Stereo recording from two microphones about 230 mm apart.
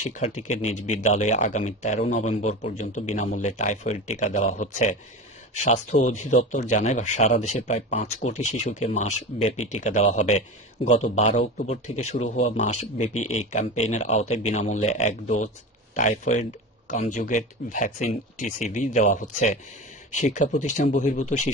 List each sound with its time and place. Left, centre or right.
0.0 s a man's voice: left
13.1 s speech: left
13.7 s a man's voice: left